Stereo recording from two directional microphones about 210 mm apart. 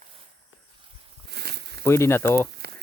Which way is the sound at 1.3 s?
50° right (ahead or behind).